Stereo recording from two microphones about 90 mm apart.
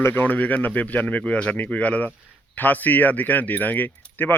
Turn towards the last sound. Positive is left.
turn(degrees=20)  # may be behind; listen again after turning